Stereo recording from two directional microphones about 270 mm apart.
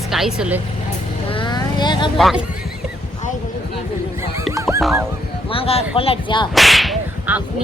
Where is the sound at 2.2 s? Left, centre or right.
Centre.